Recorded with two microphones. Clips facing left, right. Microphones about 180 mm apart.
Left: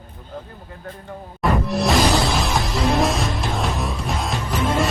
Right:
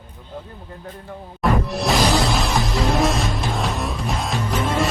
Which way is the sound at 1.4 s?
Centre (ahead or behind).